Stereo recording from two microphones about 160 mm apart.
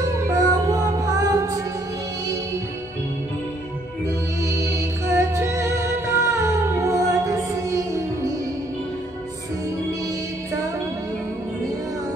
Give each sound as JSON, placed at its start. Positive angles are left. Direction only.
{"t": 0.0, "sound": "music", "side_deg": -20}
{"t": 4.5, "sound": "music", "side_deg": -15}